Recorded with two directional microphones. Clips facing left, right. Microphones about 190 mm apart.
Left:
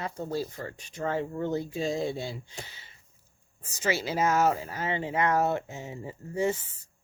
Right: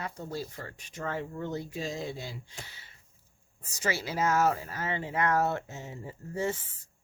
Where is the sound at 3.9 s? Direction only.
20° left (ahead or behind).